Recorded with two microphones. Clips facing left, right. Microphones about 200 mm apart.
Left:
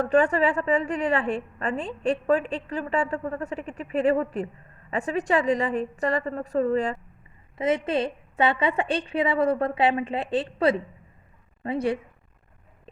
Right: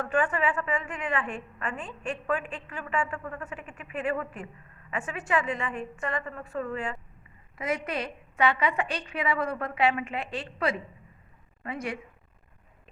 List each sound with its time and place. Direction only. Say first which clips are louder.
0.0 s a woman's voice: left 6 dB; 35° left (ahead or behind)